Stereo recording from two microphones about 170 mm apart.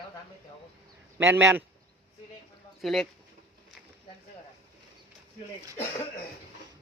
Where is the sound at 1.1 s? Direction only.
15° right (ahead or behind).